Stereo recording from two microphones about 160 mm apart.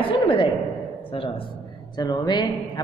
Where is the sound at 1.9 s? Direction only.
25° left (ahead or behind).